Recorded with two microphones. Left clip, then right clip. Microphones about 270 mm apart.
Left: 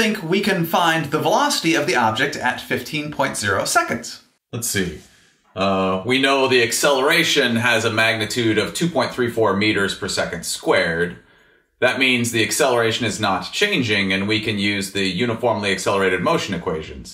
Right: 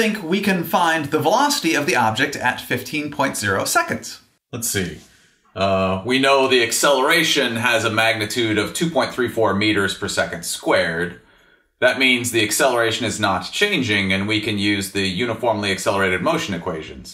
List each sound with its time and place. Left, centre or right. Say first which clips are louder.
0.0 s speech: left 1 dB; centre
5.6 s speech: even; right
12.0 s speech: right 1 dB; right